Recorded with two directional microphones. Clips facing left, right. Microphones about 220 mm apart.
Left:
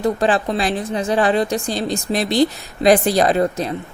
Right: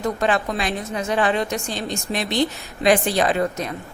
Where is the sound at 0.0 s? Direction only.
30° left (ahead or behind).